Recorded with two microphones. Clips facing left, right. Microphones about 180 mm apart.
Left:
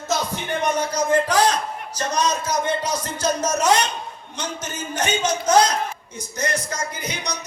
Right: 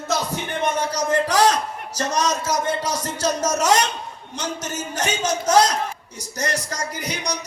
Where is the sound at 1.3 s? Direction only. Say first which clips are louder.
Right 1 dB; 40° right (ahead or behind).